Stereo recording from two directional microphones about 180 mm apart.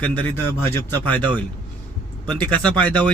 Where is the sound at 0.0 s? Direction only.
10° left (ahead or behind).